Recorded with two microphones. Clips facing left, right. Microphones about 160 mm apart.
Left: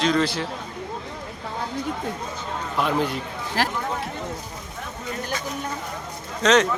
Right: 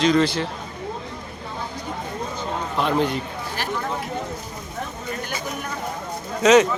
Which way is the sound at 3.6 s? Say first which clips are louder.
Left 5 dB; 90° left.